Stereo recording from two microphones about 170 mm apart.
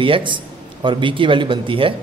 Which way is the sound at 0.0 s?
30° right (ahead or behind).